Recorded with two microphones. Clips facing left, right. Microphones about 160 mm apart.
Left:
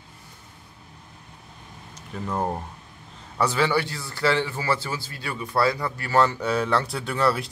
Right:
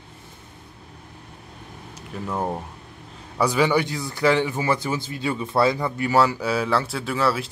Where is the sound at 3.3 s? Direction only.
15° right (ahead or behind).